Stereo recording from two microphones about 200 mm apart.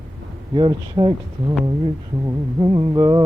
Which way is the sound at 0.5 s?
25° right (ahead or behind).